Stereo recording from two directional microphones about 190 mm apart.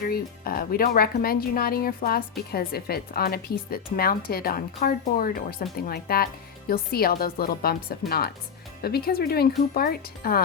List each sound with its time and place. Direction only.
0.1 s speech: 50° left (ahead or behind)